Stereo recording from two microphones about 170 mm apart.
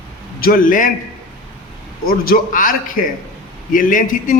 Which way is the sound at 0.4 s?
55° left (ahead or behind).